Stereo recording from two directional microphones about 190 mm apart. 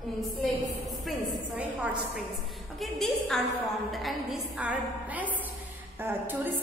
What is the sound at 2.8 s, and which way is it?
A woman's voice, centre (ahead or behind).